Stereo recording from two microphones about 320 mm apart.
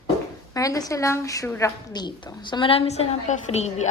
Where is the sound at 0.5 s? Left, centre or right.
Centre.